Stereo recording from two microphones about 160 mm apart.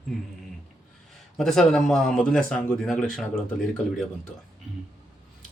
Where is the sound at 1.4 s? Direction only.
5° left (ahead or behind).